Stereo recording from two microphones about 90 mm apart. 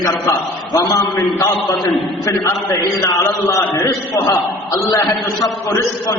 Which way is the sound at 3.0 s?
40° left (ahead or behind).